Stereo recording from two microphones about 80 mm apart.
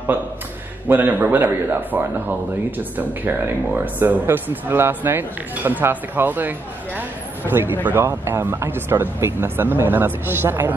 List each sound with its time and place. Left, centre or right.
0.8 s speech: right